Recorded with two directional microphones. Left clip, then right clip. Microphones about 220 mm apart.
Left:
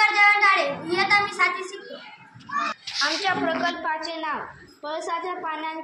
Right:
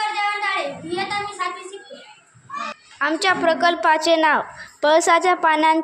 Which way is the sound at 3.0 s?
45° right (ahead or behind).